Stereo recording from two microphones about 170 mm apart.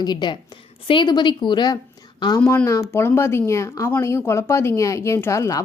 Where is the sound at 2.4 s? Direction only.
10° left (ahead or behind).